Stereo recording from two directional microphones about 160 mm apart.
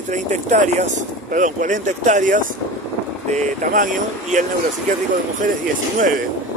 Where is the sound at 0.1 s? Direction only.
50° right (ahead or behind).